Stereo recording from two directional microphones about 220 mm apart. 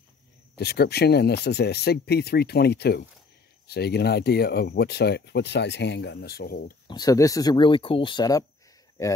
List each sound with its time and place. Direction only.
0.6 s speech: 45° left (ahead or behind)
6.9 s speech: 15° left (ahead or behind)